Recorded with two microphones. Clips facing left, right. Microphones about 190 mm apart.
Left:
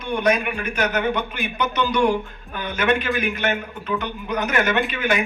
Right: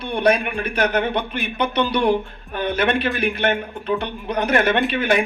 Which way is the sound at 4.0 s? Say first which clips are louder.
Right 2 dB; 30° right (ahead or behind).